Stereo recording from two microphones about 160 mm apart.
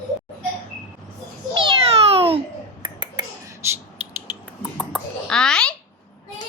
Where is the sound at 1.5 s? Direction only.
30° right (ahead or behind).